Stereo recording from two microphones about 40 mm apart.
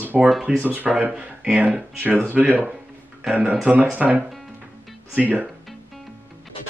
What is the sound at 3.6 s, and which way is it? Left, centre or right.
Speech, right.